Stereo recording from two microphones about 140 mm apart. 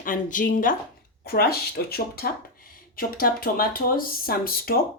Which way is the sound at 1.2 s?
90° left.